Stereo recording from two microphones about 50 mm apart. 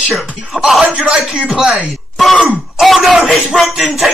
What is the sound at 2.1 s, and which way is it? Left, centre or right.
Speech, centre.